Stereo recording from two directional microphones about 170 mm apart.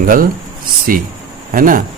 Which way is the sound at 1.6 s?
55° right (ahead or behind).